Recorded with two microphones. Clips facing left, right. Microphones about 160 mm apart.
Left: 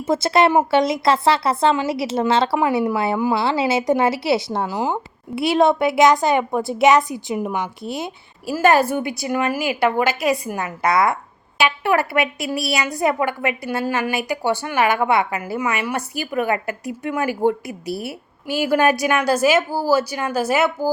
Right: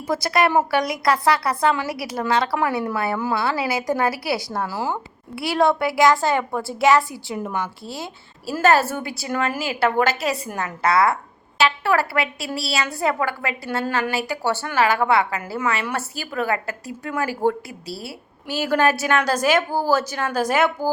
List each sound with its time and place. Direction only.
0.0 s a woman's voice: 25° left (ahead or behind); by 20.9 s 10° left (ahead or behind)